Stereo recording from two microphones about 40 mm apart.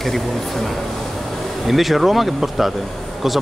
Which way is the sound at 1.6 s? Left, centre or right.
Centre.